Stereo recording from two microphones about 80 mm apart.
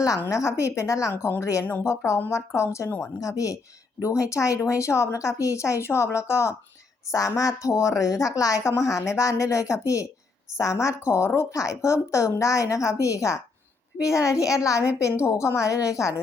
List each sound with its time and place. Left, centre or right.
0.3 s speech: left
1.1 s a woman's voice: left